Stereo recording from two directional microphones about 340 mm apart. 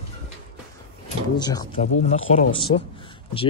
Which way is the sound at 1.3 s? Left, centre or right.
Centre.